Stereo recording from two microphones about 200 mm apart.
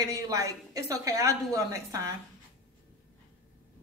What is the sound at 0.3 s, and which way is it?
A woman's voice, 15° right (ahead or behind).